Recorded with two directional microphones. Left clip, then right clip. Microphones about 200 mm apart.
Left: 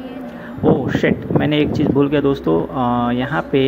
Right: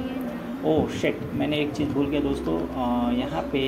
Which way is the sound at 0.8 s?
40° left (ahead or behind).